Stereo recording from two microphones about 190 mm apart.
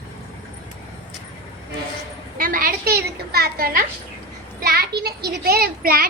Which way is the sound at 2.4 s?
45° right (ahead or behind).